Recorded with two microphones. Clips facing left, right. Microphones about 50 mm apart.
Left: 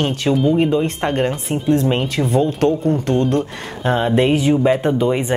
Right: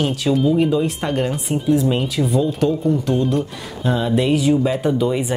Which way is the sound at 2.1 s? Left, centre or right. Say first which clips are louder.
Left 1 dB; left.